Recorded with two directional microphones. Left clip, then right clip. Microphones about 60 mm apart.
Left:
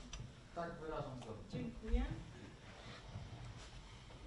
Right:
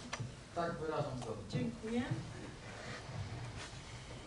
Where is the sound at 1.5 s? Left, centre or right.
Right.